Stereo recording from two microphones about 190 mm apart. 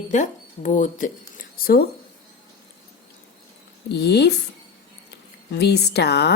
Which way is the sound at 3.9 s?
60° left (ahead or behind).